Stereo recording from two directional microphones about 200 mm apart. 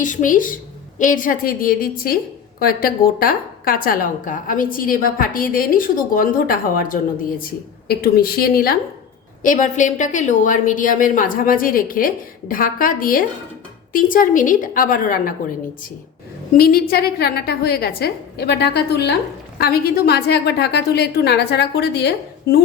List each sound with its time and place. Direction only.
0.0 s a woman's voice: 40° left (ahead or behind)
16.6 s a woman's voice: 50° left (ahead or behind)